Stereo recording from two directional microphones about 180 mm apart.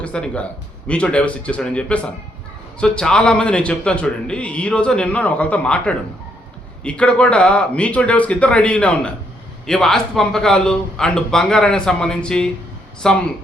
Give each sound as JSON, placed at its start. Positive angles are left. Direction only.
{"t": 0.0, "sound": "a man's voice", "side_deg": 5}